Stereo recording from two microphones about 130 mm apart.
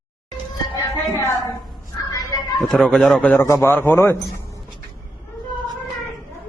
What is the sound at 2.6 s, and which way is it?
A man's voice, centre (ahead or behind).